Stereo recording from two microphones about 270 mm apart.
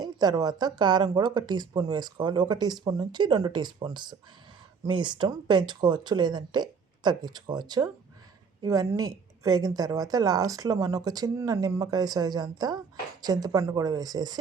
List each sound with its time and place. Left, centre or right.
0.0 s speech: centre